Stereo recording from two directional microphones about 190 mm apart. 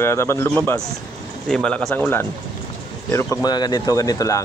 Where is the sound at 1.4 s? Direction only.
5° left (ahead or behind).